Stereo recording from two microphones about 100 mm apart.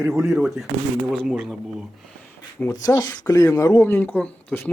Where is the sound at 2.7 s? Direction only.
40° left (ahead or behind).